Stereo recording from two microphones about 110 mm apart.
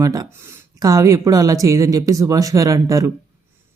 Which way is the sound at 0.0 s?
35° right (ahead or behind).